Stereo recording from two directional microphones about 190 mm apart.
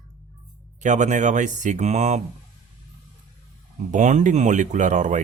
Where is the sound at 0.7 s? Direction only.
40° right (ahead or behind).